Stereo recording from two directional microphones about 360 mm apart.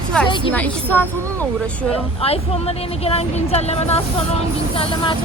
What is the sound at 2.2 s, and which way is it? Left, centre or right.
Speech, centre.